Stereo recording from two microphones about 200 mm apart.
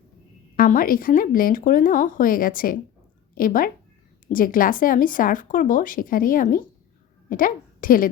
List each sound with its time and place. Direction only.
0.5 s a woman's voice: 45° left (ahead or behind)